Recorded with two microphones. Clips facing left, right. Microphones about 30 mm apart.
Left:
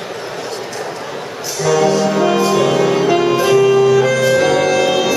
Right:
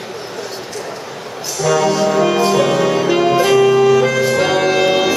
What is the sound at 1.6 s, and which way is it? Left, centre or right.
Music, centre.